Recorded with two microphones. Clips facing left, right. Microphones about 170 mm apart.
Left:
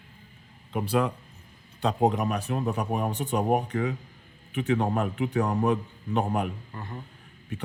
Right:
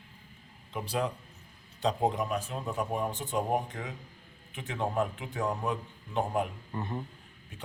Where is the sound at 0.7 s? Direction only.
60° left (ahead or behind).